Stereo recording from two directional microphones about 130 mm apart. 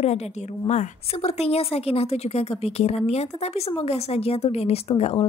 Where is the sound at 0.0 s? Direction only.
55° left (ahead or behind).